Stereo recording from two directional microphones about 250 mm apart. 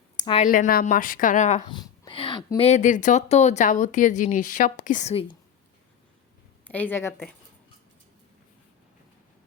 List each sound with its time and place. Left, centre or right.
0.2 s speech: left
6.7 s a woman's voice: centre